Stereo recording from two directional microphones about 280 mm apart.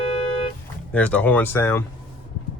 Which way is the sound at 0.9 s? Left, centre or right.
Centre.